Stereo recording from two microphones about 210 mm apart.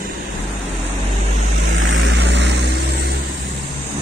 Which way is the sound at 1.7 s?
60° right (ahead or behind).